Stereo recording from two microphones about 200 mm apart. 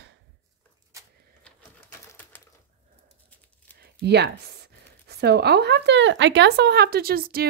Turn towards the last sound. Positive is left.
turn(degrees=-50)  # may be behind; listen again after turning